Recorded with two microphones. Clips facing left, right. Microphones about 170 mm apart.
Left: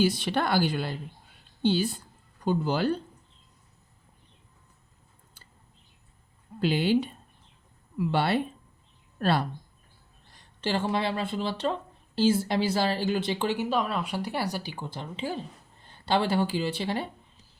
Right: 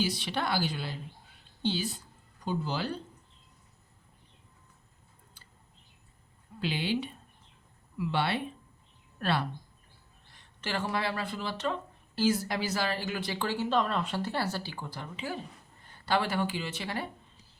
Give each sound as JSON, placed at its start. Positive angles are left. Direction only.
{"t": 0.0, "sound": "a woman's voice", "side_deg": 50}
{"t": 6.6, "sound": "a woman's voice", "side_deg": 45}
{"t": 10.3, "sound": "speech", "side_deg": 30}